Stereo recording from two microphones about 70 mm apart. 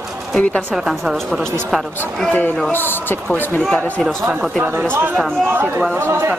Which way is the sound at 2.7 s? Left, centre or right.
Left.